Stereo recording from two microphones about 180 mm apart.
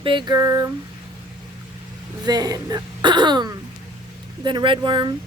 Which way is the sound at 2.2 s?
20° right (ahead or behind).